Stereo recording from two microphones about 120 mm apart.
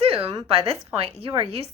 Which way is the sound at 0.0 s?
55° right (ahead or behind).